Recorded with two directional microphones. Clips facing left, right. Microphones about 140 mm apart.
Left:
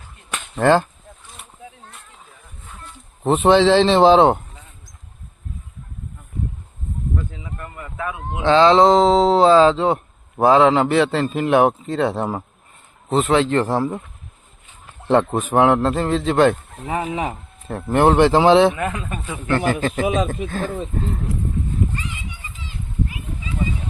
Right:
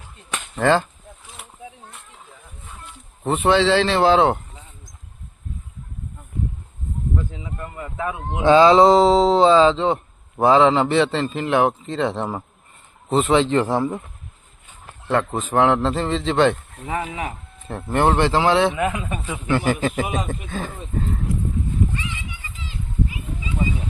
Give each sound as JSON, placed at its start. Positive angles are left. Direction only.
{"t": 0.5, "sound": "speech", "side_deg": 10}
{"t": 3.2, "sound": "speech", "side_deg": 20}
{"t": 7.3, "sound": "speech", "side_deg": -15}
{"t": 15.3, "sound": "speech", "side_deg": 10}
{"t": 17.0, "sound": "speech", "side_deg": 35}
{"t": 17.8, "sound": "speech", "side_deg": 10}
{"t": 18.8, "sound": "a man's voice", "side_deg": -10}